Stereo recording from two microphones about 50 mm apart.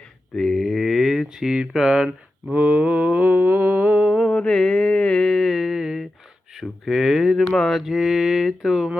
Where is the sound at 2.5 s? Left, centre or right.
Right.